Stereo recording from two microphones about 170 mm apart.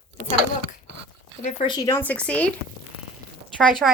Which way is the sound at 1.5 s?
30° left (ahead or behind).